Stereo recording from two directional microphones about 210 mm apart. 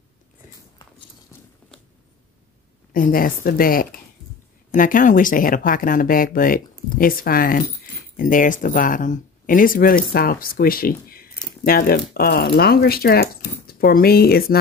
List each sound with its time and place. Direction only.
2.9 s speech: 40° left (ahead or behind)